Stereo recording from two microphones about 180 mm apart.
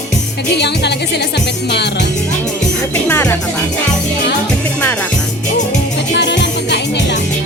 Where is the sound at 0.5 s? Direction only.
70° left (ahead or behind).